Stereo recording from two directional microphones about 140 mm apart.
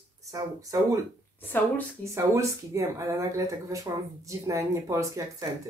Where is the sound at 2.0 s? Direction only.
20° right (ahead or behind).